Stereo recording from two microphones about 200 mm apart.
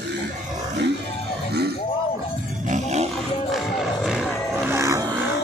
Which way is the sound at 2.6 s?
35° right (ahead or behind).